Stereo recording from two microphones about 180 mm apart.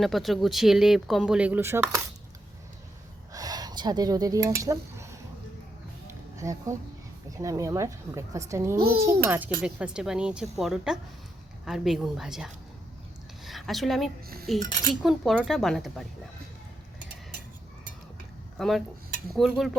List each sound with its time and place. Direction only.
0.0 s speech: centre (ahead or behind)
3.3 s speech: 20° right (ahead or behind)
6.1 s a sound: 15° right (ahead or behind)
7.3 s a woman's voice: 20° right (ahead or behind); by 16.0 s centre (ahead or behind)
18.5 s speech: 5° left (ahead or behind)